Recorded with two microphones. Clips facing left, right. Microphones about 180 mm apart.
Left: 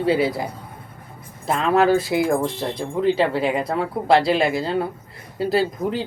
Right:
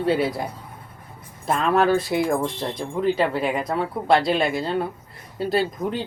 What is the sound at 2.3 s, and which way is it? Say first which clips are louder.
Speech: left 2 dB; 25° left (ahead or behind).